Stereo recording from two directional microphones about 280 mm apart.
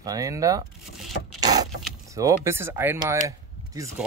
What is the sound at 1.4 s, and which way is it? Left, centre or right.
Vehicle, centre.